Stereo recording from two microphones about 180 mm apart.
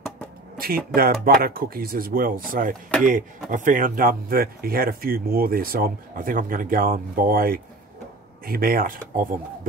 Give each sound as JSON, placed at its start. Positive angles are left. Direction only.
{"t": 0.6, "sound": "speech", "side_deg": -55}